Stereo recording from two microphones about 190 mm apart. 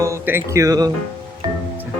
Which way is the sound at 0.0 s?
15° right (ahead or behind).